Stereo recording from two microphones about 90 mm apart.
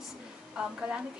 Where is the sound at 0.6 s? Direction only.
10° right (ahead or behind).